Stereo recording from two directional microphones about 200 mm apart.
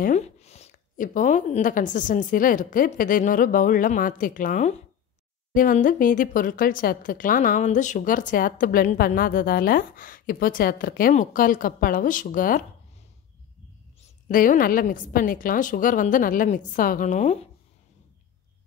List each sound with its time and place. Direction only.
0.0 s a woman's voice: 35° left (ahead or behind)
14.0 s a woman's voice: 40° left (ahead or behind)